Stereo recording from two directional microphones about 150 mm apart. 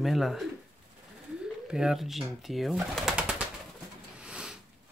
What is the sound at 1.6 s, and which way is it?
Speech, 5° right (ahead or behind).